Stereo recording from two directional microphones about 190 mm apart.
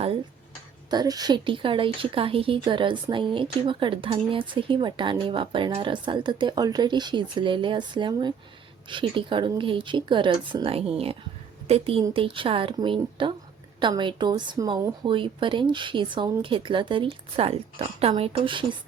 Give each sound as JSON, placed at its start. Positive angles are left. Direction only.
{"t": 0.9, "sound": "a woman's voice", "side_deg": -20}